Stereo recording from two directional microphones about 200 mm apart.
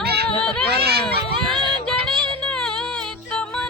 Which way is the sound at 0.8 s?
50° right (ahead or behind).